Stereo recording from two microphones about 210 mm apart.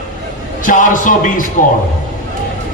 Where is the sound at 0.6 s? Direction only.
40° left (ahead or behind).